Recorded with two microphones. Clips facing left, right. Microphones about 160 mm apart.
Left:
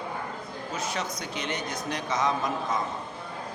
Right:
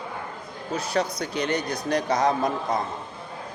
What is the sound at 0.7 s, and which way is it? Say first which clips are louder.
Speech: right 7 dB; 35° right (ahead or behind).